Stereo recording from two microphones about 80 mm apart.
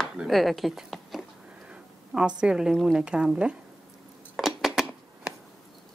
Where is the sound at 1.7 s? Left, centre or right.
Centre.